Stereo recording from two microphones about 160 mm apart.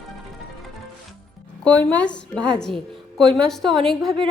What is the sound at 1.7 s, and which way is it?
A woman's voice, 10° left (ahead or behind).